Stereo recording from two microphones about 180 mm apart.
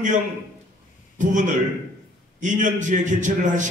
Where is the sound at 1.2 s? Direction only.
45° right (ahead or behind).